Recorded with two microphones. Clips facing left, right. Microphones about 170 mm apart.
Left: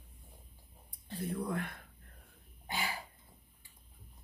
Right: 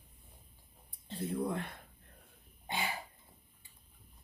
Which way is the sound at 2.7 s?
25° right (ahead or behind).